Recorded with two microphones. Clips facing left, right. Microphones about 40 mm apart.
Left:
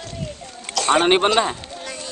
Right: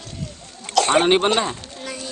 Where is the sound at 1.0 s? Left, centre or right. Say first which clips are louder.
Left 1 dB; centre.